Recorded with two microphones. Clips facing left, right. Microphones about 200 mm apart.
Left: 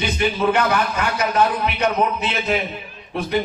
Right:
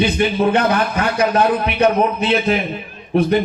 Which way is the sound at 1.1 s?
55° right (ahead or behind).